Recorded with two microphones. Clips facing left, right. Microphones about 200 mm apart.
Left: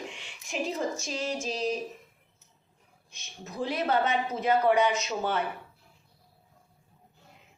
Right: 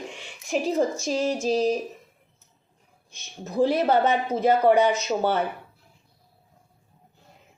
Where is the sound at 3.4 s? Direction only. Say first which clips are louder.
Right 9 dB; 40° right (ahead or behind).